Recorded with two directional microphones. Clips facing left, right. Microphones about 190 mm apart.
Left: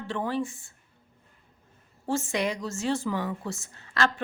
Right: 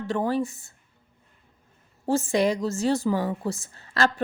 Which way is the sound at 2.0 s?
35° right (ahead or behind).